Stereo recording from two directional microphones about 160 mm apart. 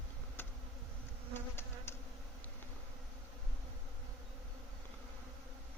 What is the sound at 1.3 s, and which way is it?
Bee, 15° left (ahead or behind).